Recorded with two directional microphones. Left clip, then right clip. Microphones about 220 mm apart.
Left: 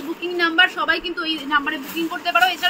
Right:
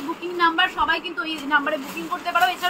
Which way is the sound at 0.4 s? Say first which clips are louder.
Left 2 dB; 20° right (ahead or behind).